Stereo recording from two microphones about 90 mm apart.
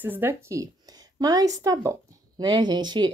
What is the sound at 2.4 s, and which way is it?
Speech, 55° right (ahead or behind).